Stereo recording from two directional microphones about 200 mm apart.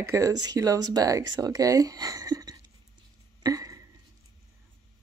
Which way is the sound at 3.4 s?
15° right (ahead or behind).